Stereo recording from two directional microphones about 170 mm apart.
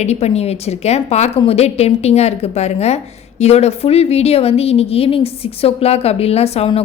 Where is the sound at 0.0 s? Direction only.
40° left (ahead or behind).